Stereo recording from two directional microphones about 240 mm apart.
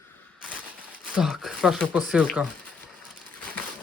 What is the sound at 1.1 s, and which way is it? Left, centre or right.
Speech, centre.